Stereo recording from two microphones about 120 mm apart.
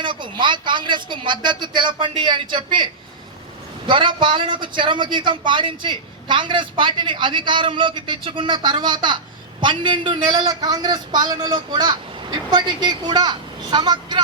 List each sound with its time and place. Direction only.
0.0 s a woman's voice: 40° right (ahead or behind)